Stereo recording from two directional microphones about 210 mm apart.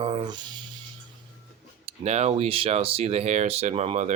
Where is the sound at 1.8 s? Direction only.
30° right (ahead or behind).